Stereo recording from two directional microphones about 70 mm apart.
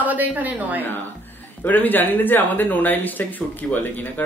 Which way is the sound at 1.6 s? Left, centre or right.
Left.